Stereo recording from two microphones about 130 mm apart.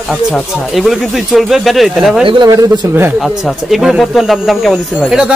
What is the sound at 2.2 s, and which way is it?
Speech, 35° right (ahead or behind).